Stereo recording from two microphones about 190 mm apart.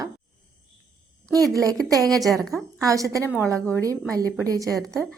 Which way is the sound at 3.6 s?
5° left (ahead or behind).